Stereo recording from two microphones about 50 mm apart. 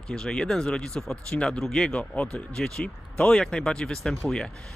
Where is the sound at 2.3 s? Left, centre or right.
Centre.